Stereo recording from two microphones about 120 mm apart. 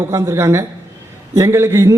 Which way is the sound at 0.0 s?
25° right (ahead or behind).